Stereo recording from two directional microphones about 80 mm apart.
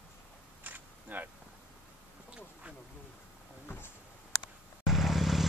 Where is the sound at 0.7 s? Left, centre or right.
Right.